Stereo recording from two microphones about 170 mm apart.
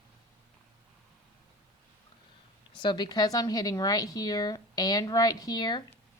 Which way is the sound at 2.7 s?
25° left (ahead or behind).